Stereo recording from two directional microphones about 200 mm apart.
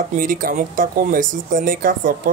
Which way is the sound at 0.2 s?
45° right (ahead or behind).